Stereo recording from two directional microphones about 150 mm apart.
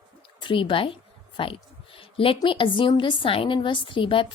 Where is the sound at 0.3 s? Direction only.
35° left (ahead or behind).